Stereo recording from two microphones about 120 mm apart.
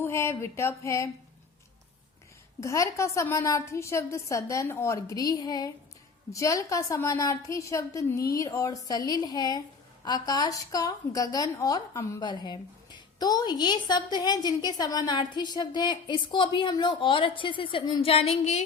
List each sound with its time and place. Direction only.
0.0 s a woman's voice: 20° left (ahead or behind)
2.6 s a woman's voice: 25° left (ahead or behind)
12.2 s a woman's voice: 40° left (ahead or behind)
18.0 s speech: 55° left (ahead or behind)